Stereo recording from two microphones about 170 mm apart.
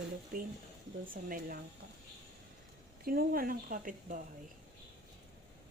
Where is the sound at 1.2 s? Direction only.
55° right (ahead or behind).